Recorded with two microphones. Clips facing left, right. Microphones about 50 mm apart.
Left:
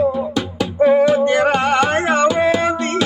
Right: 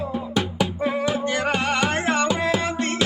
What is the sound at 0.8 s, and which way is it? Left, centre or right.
Music, centre.